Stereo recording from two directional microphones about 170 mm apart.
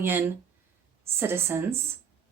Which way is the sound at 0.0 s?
15° right (ahead or behind).